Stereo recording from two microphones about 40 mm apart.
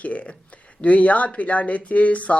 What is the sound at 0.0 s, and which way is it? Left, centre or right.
Speech, left.